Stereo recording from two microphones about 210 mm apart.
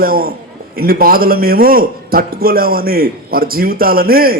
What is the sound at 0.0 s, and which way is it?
A man's voice, 45° right (ahead or behind).